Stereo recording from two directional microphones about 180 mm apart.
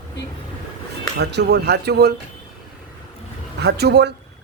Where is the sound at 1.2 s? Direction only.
70° right (ahead or behind).